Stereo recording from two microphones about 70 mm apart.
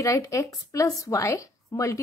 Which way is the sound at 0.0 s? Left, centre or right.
Left.